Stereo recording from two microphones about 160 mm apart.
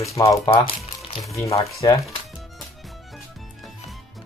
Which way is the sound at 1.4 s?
40° left (ahead or behind).